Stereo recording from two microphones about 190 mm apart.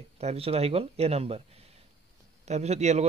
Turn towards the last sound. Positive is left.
turn(degrees=-35)  # may be behind; listen again after turning